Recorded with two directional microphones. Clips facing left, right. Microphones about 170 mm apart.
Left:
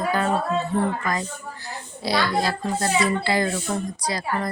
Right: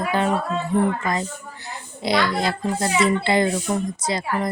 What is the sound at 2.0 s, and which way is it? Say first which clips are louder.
A child's voice: right 2 dB; 20° right (ahead or behind).